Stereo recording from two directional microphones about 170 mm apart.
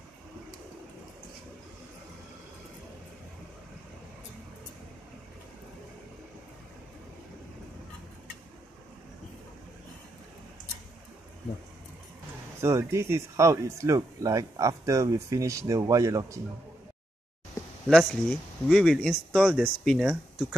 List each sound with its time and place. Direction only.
12.5 s speech: 15° right (ahead or behind)
17.8 s speech: 5° left (ahead or behind)